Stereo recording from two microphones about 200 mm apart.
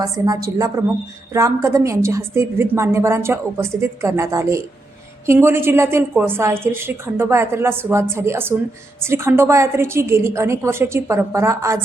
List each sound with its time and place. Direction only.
0.0 s a woman's voice: 15° right (ahead or behind)